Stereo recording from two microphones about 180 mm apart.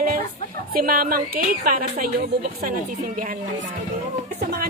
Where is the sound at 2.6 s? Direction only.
50° right (ahead or behind).